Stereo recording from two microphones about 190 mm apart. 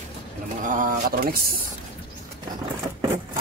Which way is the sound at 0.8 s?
50° right (ahead or behind).